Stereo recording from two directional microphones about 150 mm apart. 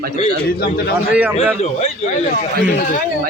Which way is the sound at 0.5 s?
90° left.